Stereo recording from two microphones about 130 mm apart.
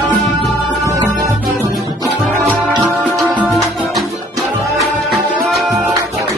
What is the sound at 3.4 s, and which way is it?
Music, centre (ahead or behind).